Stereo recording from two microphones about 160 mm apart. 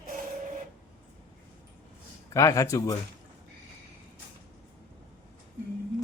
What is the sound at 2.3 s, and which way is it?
Speech, 20° left (ahead or behind).